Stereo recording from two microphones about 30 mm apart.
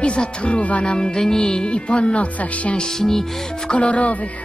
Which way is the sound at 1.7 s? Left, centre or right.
Left.